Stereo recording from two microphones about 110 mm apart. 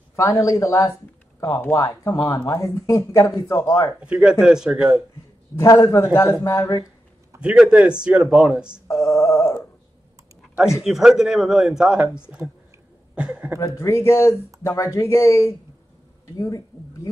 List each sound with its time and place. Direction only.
0.1 s speech: 30° left (ahead or behind)
4.0 s speech: 10° right (ahead or behind)
5.9 s speech: 25° left (ahead or behind)
7.3 s speech: 10° right (ahead or behind)
8.8 s a sound: 30° left (ahead or behind)
10.8 s speech: 5° right (ahead or behind)
13.6 s speech: 25° left (ahead or behind)